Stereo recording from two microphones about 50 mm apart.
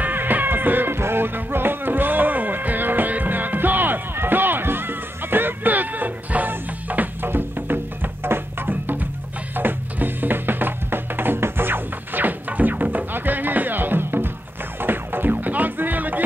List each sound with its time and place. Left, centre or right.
0.0 s music: right